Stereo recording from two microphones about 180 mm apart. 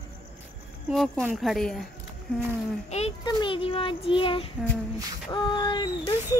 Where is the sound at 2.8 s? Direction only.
35° left (ahead or behind).